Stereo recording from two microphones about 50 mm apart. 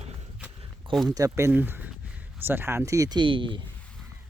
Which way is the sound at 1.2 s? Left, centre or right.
Right.